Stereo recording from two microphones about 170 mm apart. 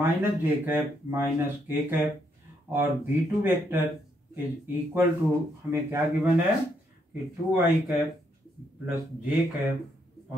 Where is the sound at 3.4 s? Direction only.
10° right (ahead or behind).